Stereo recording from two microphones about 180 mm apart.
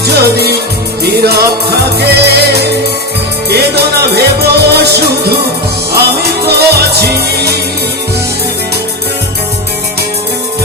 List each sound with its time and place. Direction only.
0.1 s music: 60° right (ahead or behind)
6.6 s music: 65° right (ahead or behind)